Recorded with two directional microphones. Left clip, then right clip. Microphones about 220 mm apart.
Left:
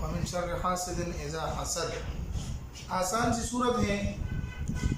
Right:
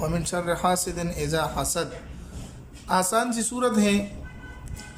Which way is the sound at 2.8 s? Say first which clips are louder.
Right 7 dB; 50° right (ahead or behind).